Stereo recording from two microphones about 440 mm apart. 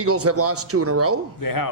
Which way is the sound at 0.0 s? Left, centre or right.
Right.